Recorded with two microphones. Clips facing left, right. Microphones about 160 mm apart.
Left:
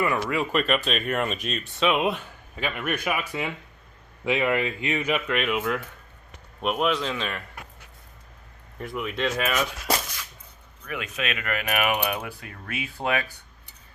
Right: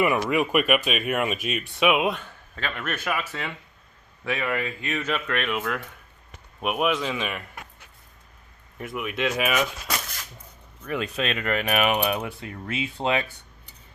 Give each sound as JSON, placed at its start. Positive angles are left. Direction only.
{"t": 0.0, "sound": "speech", "side_deg": -20}
{"t": 2.0, "sound": "speech", "side_deg": 5}
{"t": 6.6, "sound": "speech", "side_deg": -5}
{"t": 8.8, "sound": "speech", "side_deg": -5}
{"t": 10.8, "sound": "speech", "side_deg": -35}